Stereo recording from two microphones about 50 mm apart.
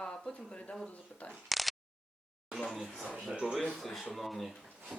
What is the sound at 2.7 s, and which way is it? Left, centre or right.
Speech, centre.